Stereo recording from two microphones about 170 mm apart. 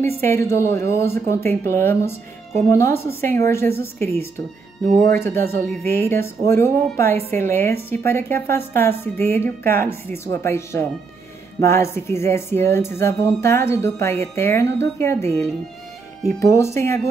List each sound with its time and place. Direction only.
0.0 s a woman's voice: 15° left (ahead or behind)
4.8 s speech: 45° right (ahead or behind)
5.1 s a woman's voice: 15° left (ahead or behind)